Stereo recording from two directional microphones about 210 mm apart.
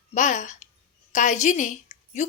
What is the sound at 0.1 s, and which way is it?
A woman's voice, 35° left (ahead or behind).